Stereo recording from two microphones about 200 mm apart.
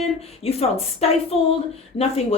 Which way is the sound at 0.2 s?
30° left (ahead or behind).